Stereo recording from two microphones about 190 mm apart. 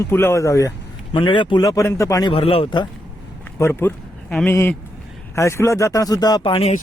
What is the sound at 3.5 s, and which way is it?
Speech, 15° left (ahead or behind).